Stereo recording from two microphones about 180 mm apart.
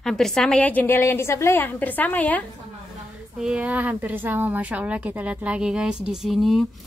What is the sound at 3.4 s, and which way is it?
A woman's voice, 5° right (ahead or behind).